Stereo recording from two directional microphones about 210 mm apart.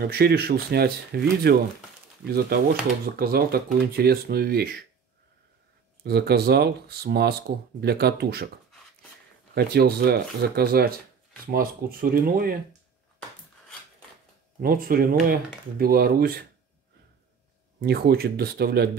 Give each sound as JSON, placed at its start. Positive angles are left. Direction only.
{"t": 0.0, "sound": "speech", "side_deg": -50}
{"t": 6.0, "sound": "speech", "side_deg": -50}
{"t": 9.5, "sound": "speech", "side_deg": -50}
{"t": 14.6, "sound": "speech", "side_deg": -45}
{"t": 17.7, "sound": "speech", "side_deg": -50}